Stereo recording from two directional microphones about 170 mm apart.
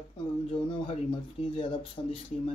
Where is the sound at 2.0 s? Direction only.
30° left (ahead or behind).